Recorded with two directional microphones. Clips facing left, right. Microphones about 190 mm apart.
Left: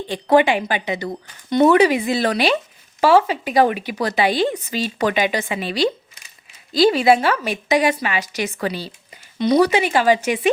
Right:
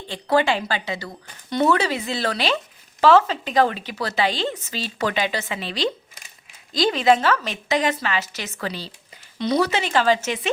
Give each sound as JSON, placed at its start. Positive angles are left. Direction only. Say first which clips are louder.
{"t": 0.1, "sound": "a woman's voice", "louder": "left 5 dB", "side_deg": 15}